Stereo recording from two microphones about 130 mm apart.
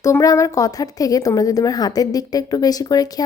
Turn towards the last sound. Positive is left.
turn(degrees=30)  # may be behind; listen again after turning